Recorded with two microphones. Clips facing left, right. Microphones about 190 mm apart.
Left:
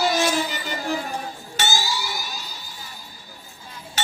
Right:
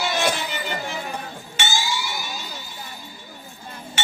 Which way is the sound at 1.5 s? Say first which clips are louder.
Left 1 dB; 40° left (ahead or behind).